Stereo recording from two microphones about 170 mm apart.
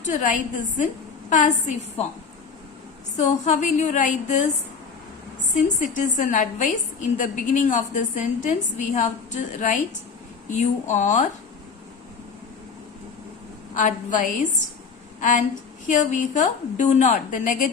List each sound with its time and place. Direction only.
0.0 s a woman's voice: 50° left (ahead or behind)
3.2 s a woman's voice: 45° left (ahead or behind)
5.6 s a woman's voice: 50° left (ahead or behind)
13.7 s a woman's voice: 50° left (ahead or behind)